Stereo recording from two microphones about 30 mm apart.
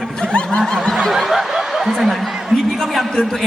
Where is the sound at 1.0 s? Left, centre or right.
Centre.